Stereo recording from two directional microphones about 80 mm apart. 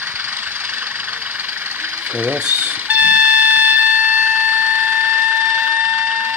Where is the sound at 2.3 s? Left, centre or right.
Centre.